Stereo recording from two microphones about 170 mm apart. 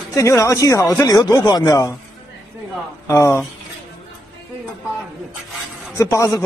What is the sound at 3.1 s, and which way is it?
Speech, 15° left (ahead or behind).